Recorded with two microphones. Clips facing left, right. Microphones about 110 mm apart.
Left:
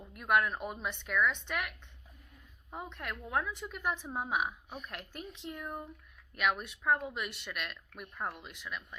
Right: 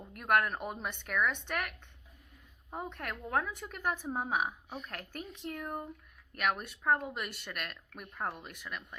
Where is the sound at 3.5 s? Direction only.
50° right (ahead or behind).